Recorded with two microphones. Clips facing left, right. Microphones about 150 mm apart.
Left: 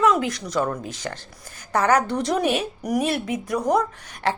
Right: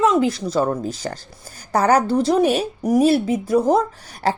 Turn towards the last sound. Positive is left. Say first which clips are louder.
# right 3 dB
turn(degrees=-35)  # may be behind; listen again after turning